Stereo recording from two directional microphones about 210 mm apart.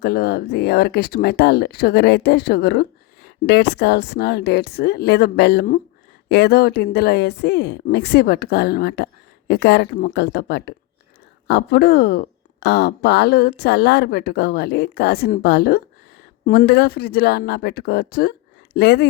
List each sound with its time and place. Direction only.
0.0 s speech: 45° left (ahead or behind)